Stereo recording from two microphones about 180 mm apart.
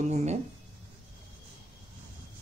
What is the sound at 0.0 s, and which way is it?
Speech, 40° right (ahead or behind).